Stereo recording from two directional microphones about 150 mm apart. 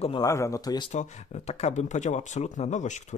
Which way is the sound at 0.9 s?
50° left (ahead or behind).